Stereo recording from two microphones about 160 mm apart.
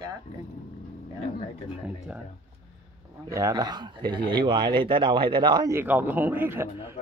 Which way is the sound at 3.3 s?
20° right (ahead or behind).